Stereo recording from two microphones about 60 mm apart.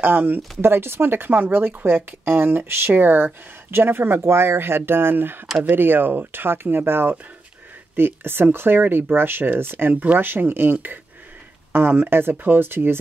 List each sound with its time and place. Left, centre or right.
0.0 s speech: right